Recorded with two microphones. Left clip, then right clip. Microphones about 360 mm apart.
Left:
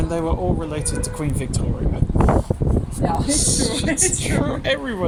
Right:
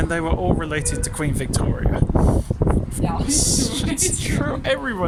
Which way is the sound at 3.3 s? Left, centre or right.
Centre.